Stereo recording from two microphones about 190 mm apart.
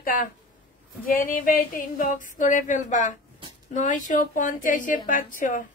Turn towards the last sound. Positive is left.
turn(degrees=45)  # may be behind; listen again after turning